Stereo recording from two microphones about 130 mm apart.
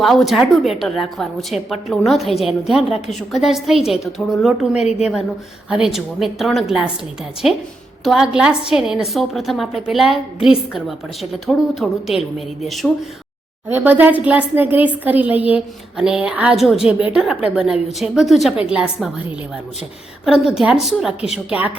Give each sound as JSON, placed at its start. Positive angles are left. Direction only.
{"t": 0.0, "sound": "a woman's voice", "side_deg": 0}
{"t": 4.7, "sound": "a woman's voice", "side_deg": 60}
{"t": 5.6, "sound": "a woman's voice", "side_deg": -5}
{"t": 8.0, "sound": "a woman's voice", "side_deg": 0}
{"t": 13.7, "sound": "a woman's voice", "side_deg": -15}
{"t": 20.2, "sound": "a woman's voice", "side_deg": -5}